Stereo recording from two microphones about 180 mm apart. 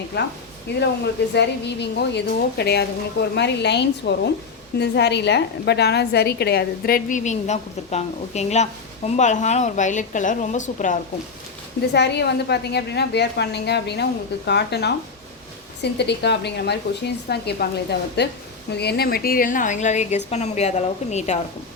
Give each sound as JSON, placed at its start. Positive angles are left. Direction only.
{"t": 0.1, "sound": "a woman's voice", "side_deg": 75}
{"t": 11.9, "sound": "a woman's voice", "side_deg": 65}